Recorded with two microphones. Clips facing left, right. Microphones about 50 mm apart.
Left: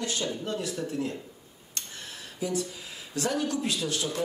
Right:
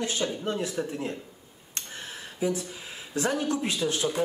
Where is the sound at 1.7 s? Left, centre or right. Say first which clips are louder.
Right 2 dB; right.